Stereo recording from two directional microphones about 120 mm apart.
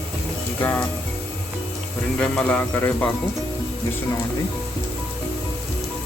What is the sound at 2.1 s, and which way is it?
Speech, 10° left (ahead or behind).